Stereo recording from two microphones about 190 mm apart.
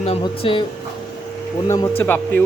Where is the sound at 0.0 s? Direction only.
30° left (ahead or behind).